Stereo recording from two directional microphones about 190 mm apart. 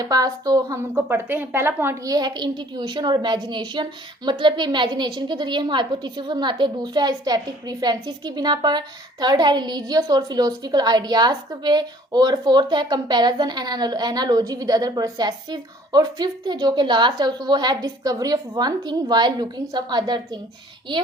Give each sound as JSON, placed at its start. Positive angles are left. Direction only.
{"t": 0.0, "sound": "a woman's voice", "side_deg": -20}